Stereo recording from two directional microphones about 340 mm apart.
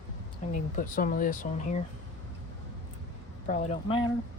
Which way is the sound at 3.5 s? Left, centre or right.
Centre.